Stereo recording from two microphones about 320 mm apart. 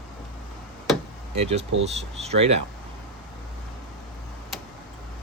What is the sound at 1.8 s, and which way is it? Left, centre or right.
Speech, centre.